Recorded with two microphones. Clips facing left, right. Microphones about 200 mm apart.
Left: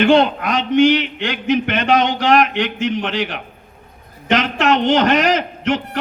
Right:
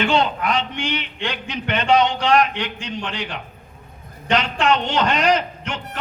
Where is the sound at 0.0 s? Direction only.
50° left (ahead or behind).